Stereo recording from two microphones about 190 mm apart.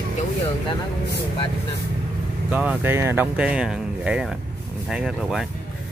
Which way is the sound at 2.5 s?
5° right (ahead or behind).